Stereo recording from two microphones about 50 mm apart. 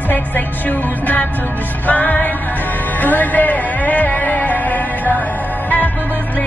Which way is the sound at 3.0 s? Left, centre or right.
Left.